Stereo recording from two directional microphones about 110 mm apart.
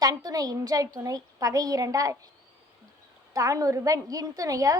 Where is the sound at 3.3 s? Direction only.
30° right (ahead or behind).